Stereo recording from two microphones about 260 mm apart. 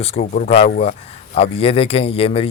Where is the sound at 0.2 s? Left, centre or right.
Left.